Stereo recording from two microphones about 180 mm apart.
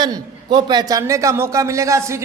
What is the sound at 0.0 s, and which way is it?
A man's voice, 25° right (ahead or behind).